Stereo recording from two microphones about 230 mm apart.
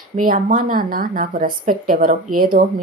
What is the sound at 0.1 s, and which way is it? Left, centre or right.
Speech, right.